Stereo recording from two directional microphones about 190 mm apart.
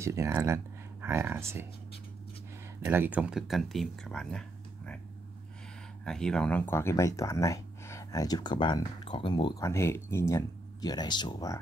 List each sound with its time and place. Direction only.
0.0 s speech: 15° right (ahead or behind)
2.8 s speech: 10° right (ahead or behind)
6.0 s speech: 5° left (ahead or behind); by 11.5 s 20° left (ahead or behind)